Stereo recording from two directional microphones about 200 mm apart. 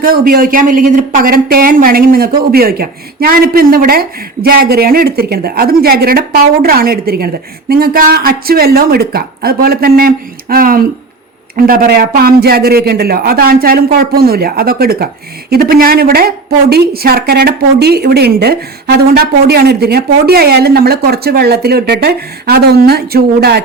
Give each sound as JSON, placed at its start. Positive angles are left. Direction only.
{"t": 0.0, "sound": "a man's voice", "side_deg": -45}